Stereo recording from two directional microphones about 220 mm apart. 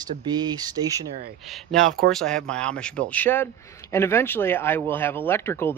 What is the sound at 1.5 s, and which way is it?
Speech, centre (ahead or behind).